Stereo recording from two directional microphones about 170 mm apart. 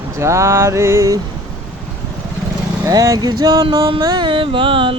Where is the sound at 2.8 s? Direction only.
20° right (ahead or behind).